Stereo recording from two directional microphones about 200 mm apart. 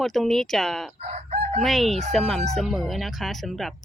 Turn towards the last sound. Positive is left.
turn(degrees=0)  # may be behind; listen again after turning